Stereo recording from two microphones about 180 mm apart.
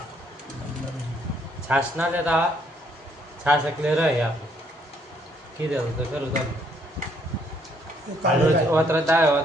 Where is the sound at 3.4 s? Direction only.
5° right (ahead or behind).